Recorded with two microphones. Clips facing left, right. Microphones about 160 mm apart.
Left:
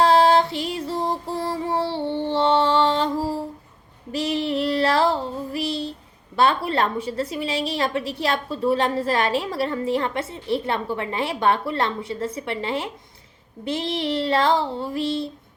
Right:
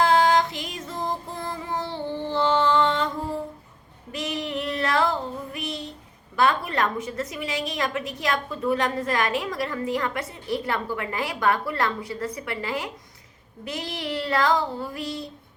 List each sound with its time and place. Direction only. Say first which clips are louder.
0.0 s music: left 3 dB; 30° left (ahead or behind)
4.1 s child singing: left 6 dB; 30° left (ahead or behind)
6.3 s a woman's voice: left 3 dB; 30° left (ahead or behind)